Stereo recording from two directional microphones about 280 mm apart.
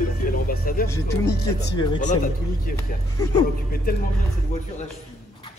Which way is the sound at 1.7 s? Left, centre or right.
Centre.